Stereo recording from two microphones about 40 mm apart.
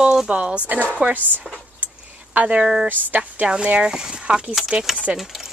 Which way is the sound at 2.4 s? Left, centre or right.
Right.